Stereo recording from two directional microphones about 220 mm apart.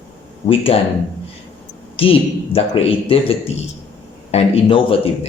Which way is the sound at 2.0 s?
25° left (ahead or behind).